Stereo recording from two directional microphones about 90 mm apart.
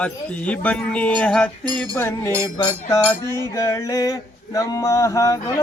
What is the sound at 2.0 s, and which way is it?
Music, 25° left (ahead or behind).